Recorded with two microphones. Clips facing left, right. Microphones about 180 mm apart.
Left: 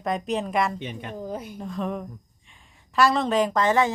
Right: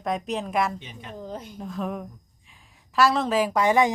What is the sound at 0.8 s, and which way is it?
Speech, 65° left (ahead or behind).